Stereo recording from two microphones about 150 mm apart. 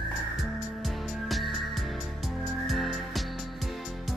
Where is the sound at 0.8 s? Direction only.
Centre (ahead or behind).